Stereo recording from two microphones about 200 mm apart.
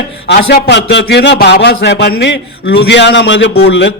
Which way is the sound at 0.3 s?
55° left (ahead or behind).